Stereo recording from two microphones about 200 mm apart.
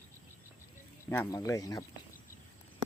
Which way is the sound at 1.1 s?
15° left (ahead or behind).